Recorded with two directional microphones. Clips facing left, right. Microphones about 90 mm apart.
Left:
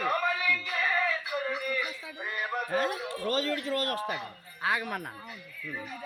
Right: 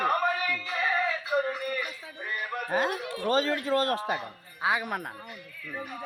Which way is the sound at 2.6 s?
65° right (ahead or behind).